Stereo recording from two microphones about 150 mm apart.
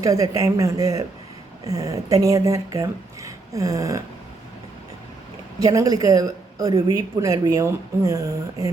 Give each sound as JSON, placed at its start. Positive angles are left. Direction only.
{"t": 0.0, "sound": "a woman's voice", "side_deg": -20}
{"t": 5.5, "sound": "a woman's voice", "side_deg": -25}